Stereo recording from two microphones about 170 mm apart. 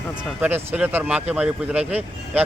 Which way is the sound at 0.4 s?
10° right (ahead or behind).